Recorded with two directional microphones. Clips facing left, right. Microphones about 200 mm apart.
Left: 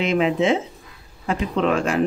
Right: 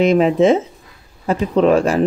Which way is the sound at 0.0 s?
40° right (ahead or behind).